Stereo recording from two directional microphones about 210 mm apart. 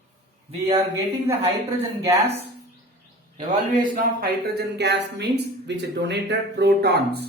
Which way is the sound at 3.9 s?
45° right (ahead or behind).